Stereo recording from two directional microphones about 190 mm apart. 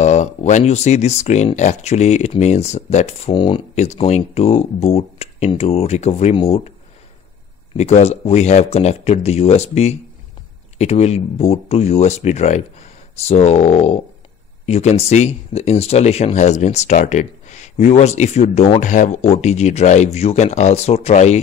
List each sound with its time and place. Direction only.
0.0 s speech: 40° left (ahead or behind)
7.7 s speech: 35° left (ahead or behind)